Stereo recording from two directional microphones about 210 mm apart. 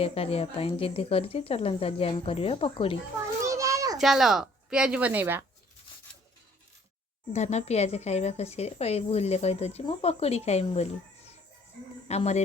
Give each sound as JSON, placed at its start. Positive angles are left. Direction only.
{"t": 0.0, "sound": "speech", "side_deg": 30}
{"t": 3.4, "sound": "children playing", "side_deg": -15}
{"t": 3.9, "sound": "speech", "side_deg": 0}
{"t": 7.3, "sound": "a woman's voice", "side_deg": 30}
{"t": 12.0, "sound": "a woman's voice", "side_deg": 30}